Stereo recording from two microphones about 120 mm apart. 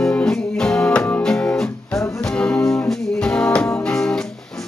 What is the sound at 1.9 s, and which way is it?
Music, 25° left (ahead or behind).